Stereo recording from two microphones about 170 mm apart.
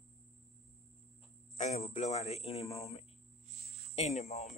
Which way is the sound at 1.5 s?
40° left (ahead or behind).